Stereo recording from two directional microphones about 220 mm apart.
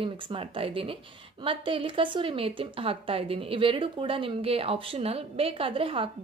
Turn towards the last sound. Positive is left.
turn(degrees=-25)  # may be behind; listen again after turning